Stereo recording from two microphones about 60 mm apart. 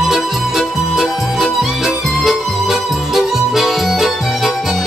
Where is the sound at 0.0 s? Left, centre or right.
Centre.